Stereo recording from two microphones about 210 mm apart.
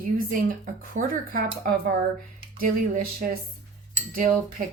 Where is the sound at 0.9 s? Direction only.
40° right (ahead or behind).